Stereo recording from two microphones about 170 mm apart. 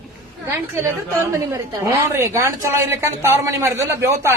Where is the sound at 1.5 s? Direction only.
15° right (ahead or behind).